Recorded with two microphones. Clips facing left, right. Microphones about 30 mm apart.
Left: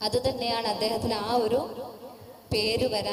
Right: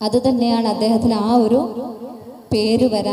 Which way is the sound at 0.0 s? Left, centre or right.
Right.